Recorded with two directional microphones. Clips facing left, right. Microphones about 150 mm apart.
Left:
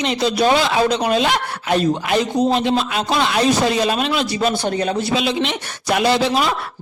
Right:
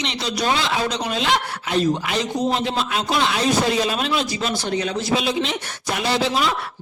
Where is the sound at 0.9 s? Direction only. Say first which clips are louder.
Left 5 dB; 55° left (ahead or behind).